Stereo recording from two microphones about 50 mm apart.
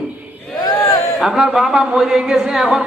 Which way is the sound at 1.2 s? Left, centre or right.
Centre.